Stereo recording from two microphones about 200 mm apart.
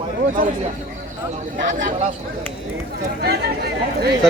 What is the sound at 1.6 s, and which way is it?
Speech, 40° right (ahead or behind).